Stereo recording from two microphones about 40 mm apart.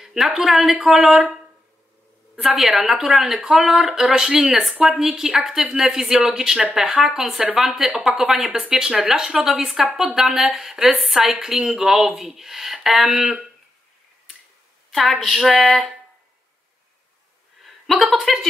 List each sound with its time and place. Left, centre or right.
0.0 s speech: centre
2.4 s speech: centre
4.1 s speech: centre
14.9 s speech: centre
18.1 s speech: centre